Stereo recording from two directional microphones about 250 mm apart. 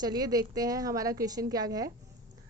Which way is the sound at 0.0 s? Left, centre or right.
Centre.